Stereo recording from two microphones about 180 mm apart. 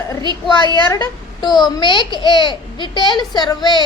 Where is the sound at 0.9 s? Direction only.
20° left (ahead or behind).